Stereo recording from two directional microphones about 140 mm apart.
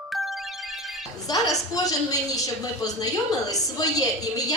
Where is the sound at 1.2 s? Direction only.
25° left (ahead or behind).